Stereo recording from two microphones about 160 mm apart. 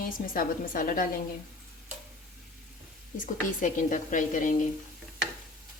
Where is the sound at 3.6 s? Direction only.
55° left (ahead or behind).